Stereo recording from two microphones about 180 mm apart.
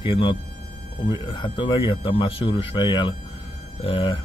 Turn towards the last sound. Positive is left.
turn(degrees=30)  # may be behind; listen again after turning